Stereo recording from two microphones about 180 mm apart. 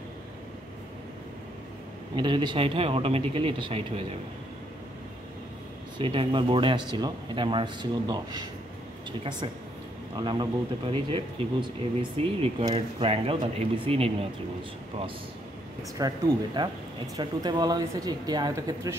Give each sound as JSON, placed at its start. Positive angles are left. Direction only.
{"t": 2.1, "sound": "speech", "side_deg": -25}
{"t": 5.9, "sound": "speech", "side_deg": -30}
{"t": 10.1, "sound": "speech", "side_deg": -25}
{"t": 16.0, "sound": "speech", "side_deg": -25}